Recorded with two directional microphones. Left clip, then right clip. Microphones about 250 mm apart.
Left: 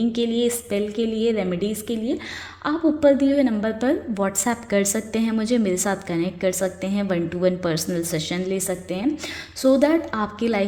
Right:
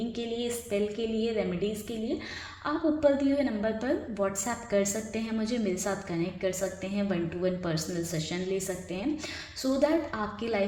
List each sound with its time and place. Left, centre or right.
0.1 s a woman's voice: left